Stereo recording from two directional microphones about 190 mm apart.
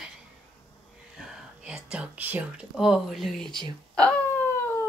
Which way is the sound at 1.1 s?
5° right (ahead or behind).